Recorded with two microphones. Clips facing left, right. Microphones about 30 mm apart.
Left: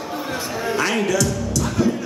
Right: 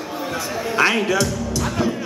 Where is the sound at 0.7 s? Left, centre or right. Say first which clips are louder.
Right 4 dB; right.